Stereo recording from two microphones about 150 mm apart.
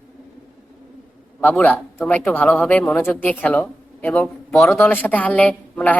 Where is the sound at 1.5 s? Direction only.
10° left (ahead or behind).